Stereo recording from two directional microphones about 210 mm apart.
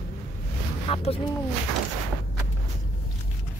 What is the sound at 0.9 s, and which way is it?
Speech, 25° left (ahead or behind).